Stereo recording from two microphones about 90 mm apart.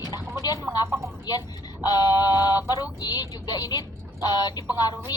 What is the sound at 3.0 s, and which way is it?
Speech, 45° left (ahead or behind).